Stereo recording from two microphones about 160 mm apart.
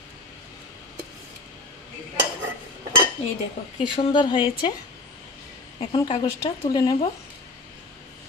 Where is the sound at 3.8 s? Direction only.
30° left (ahead or behind).